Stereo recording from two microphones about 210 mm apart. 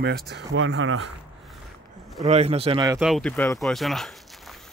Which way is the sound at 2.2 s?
30° right (ahead or behind).